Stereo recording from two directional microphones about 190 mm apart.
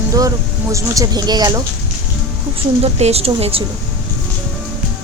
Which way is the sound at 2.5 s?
35° right (ahead or behind).